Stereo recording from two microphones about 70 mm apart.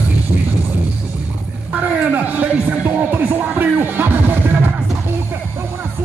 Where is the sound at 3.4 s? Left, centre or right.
Right.